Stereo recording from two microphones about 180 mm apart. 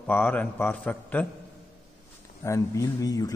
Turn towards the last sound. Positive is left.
turn(degrees=20)  # may be behind; listen again after turning